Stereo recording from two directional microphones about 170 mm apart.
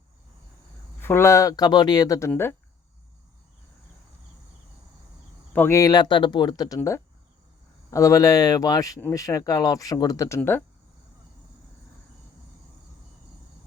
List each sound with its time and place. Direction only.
0.9 s speech: 15° left (ahead or behind)
5.5 s speech: 15° left (ahead or behind)